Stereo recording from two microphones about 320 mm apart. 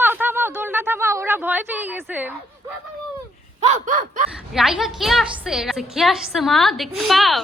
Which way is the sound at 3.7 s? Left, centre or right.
Right.